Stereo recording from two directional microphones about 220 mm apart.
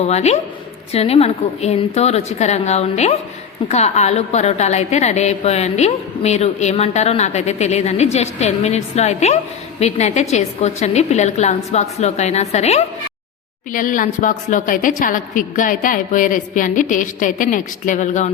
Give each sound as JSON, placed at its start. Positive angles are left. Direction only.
{"t": 0.0, "sound": "a woman's voice", "side_deg": 30}